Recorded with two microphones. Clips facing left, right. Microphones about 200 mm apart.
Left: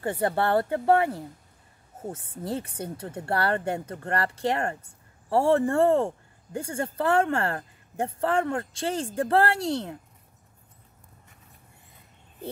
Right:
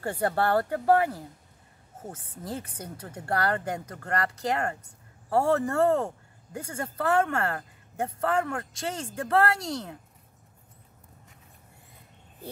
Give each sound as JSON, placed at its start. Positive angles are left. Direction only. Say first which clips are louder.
{"t": 0.0, "sound": "speech", "louder": "left 1 dB", "side_deg": 20}